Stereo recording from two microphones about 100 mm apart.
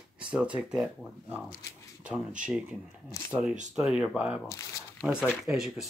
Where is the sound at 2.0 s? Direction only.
10° right (ahead or behind).